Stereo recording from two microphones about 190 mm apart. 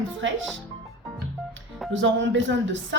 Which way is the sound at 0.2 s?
80° right.